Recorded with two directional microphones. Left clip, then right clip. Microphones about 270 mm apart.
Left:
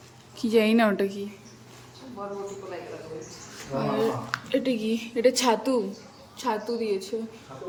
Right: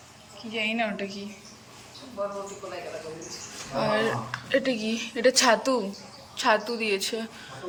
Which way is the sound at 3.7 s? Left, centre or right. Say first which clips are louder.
Right 1 dB; centre.